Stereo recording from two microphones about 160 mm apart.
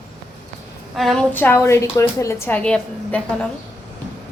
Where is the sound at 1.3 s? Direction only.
15° left (ahead or behind).